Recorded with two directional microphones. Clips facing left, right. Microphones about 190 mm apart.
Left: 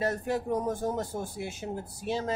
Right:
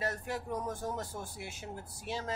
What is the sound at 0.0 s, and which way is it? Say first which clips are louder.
Speech: left 7 dB; 25° left (ahead or behind).